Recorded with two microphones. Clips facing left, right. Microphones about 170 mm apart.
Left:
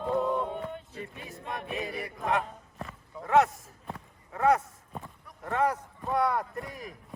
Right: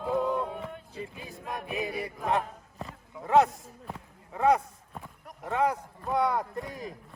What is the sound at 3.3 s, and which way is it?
Speech, centre (ahead or behind).